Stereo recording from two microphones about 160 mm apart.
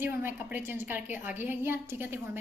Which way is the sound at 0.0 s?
15° right (ahead or behind).